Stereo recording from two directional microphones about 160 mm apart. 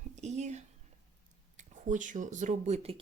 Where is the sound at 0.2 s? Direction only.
45° right (ahead or behind).